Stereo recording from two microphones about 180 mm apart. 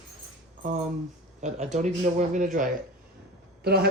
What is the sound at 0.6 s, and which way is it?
Speech, 40° right (ahead or behind).